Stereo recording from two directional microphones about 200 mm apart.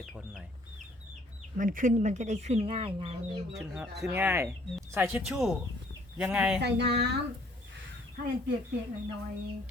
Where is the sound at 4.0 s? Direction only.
10° right (ahead or behind).